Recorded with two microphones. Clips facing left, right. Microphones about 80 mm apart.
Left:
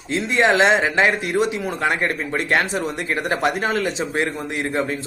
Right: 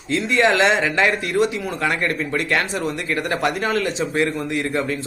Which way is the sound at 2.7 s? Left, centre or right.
Centre.